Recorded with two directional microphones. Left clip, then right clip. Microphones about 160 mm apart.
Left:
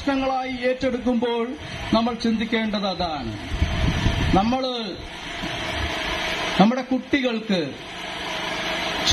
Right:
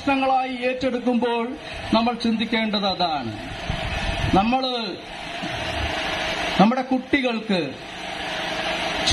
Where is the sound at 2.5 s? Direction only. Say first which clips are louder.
Right 4 dB; 25° left (ahead or behind).